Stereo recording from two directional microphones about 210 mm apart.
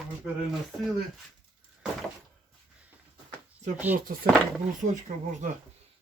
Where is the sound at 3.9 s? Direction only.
45° right (ahead or behind).